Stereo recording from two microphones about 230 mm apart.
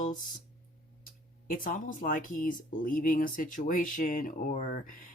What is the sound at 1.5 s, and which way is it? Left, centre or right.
Speech, left.